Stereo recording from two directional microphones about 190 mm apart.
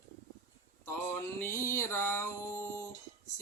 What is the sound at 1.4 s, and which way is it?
Speech, 15° left (ahead or behind).